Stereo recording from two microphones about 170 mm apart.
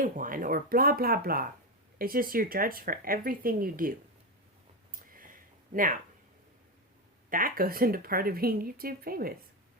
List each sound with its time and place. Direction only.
0.0 s speech: 55° right (ahead or behind)
4.9 s a sound: 55° right (ahead or behind)
7.3 s speech: 55° right (ahead or behind)